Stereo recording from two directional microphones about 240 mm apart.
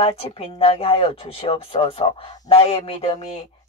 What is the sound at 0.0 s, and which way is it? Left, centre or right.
Speech, left.